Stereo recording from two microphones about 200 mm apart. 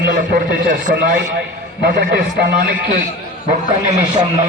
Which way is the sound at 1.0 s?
60° right (ahead or behind).